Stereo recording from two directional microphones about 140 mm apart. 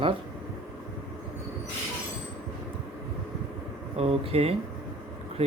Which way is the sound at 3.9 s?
45° right (ahead or behind).